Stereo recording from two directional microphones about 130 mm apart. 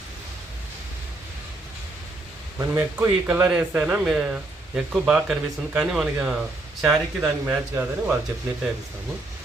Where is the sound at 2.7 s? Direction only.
15° right (ahead or behind).